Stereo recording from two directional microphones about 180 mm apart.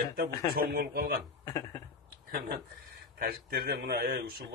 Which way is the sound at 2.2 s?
60° right (ahead or behind).